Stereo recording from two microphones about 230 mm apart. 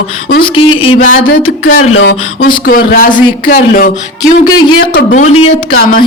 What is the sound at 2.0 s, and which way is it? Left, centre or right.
Speech, left.